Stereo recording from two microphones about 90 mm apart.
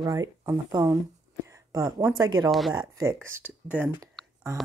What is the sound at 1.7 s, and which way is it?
Speech, 40° right (ahead or behind).